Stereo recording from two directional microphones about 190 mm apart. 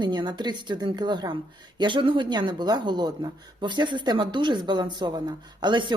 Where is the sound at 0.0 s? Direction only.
25° right (ahead or behind).